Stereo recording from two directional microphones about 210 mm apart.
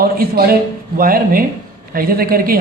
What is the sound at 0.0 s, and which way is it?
A woman's voice, 45° right (ahead or behind).